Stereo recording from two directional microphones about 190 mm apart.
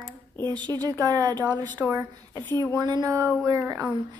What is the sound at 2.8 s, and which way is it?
Speech, 20° right (ahead or behind).